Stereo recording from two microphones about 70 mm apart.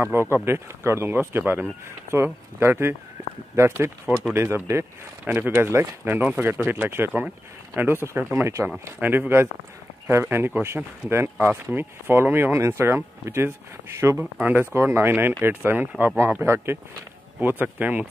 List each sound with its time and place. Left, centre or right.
0.0 s speech: right
5.2 s speech: right
5.6 s speech: right
8.6 s speech: right
14.4 s speech: right